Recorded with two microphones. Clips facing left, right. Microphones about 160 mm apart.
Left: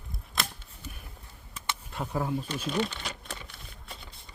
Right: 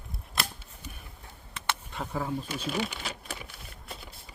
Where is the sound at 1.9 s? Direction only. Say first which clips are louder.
Left 5 dB; 5° left (ahead or behind).